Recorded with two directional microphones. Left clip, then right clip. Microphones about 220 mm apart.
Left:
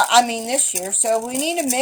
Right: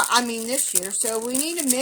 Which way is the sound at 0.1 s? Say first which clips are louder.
Left 6 dB; 55° right (ahead or behind).